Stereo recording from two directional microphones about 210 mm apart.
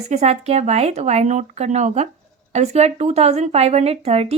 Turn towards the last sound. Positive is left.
turn(degrees=-30)  # may be behind; listen again after turning